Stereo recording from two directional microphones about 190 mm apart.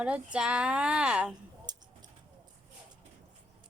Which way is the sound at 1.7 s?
20° right (ahead or behind).